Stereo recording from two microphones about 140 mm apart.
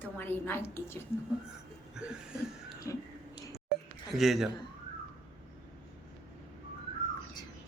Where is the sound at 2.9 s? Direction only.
20° left (ahead or behind).